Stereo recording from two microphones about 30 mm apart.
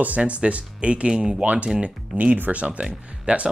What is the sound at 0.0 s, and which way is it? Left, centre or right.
Speech, right.